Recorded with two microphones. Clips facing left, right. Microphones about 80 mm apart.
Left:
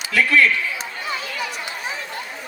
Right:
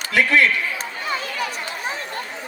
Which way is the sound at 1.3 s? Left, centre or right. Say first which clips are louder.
Right 2 dB; right.